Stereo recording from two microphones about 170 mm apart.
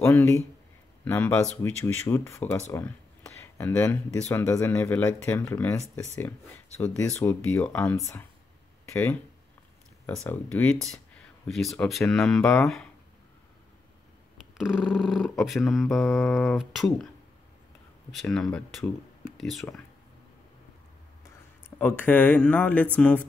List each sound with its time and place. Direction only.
0.0 s speech: 15° left (ahead or behind)
10.2 s speech: 10° left (ahead or behind)
14.6 s speech: centre (ahead or behind)
18.1 s speech: centre (ahead or behind)
21.2 s speech: 10° left (ahead or behind)